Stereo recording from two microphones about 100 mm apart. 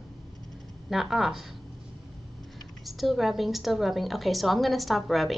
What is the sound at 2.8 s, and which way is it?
A woman's voice, centre (ahead or behind).